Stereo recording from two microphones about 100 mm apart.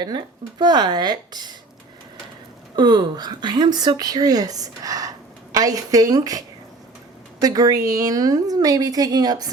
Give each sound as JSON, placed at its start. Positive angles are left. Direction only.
{"t": 0.0, "sound": "speech", "side_deg": -45}
{"t": 2.7, "sound": "speech", "side_deg": -45}
{"t": 7.4, "sound": "speech", "side_deg": -40}